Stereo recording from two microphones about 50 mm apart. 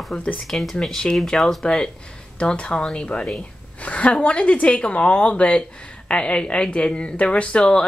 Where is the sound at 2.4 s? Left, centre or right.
Left.